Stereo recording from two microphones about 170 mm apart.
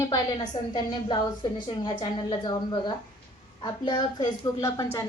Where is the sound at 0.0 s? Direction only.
20° left (ahead or behind).